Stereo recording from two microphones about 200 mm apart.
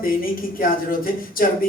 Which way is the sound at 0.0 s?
45° left (ahead or behind).